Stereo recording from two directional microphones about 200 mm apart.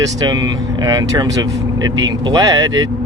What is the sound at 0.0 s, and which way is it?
Speech, 20° right (ahead or behind).